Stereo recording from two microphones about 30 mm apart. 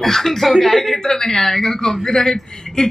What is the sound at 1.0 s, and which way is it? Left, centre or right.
Speech, centre.